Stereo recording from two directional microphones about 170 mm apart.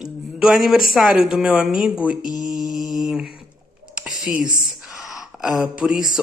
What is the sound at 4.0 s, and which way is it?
Whispering, 5° right (ahead or behind).